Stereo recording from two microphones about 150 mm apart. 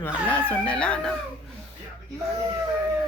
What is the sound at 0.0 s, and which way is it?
A man's voice, 15° left (ahead or behind).